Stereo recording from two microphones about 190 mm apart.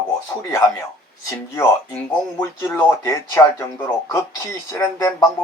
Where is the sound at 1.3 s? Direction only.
15° left (ahead or behind).